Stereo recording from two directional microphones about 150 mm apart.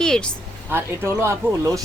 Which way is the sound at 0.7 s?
15° right (ahead or behind).